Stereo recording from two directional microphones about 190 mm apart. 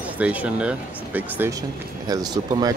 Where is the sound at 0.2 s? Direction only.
5° right (ahead or behind).